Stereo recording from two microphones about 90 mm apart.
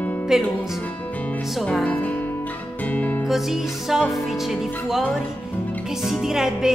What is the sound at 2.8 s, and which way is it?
Music, 20° left (ahead or behind).